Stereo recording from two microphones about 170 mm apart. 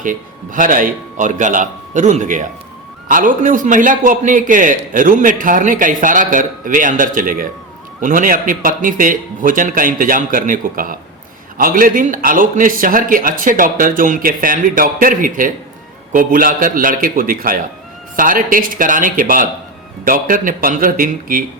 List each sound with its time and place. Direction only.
0.0 s a man's voice: 50° right (ahead or behind)